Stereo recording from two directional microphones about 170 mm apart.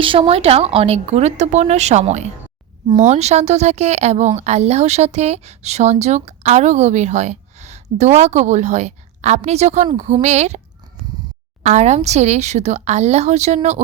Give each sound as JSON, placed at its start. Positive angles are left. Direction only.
{"t": 0.0, "sound": "speech", "side_deg": -35}
{"t": 11.6, "sound": "speech", "side_deg": -40}